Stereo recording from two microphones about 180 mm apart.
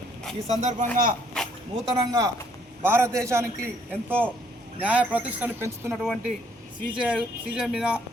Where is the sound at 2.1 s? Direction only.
20° right (ahead or behind).